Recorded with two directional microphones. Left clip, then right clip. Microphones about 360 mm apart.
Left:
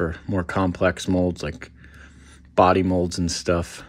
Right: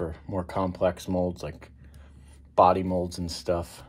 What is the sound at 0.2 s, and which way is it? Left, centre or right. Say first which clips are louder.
Speech: left 5 dB; left.